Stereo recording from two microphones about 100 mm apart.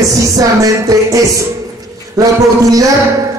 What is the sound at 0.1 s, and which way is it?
Music, 35° right (ahead or behind).